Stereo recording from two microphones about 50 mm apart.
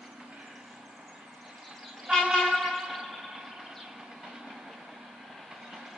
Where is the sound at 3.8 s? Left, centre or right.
Centre.